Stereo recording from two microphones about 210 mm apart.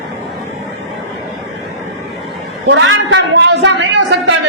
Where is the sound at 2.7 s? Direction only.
60° right (ahead or behind).